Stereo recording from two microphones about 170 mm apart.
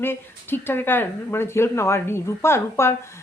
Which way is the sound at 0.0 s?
10° left (ahead or behind).